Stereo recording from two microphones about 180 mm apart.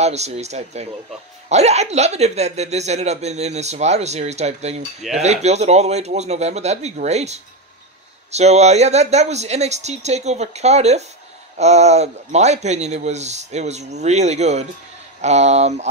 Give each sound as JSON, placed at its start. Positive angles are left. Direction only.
{"t": 0.0, "sound": "speech", "side_deg": -35}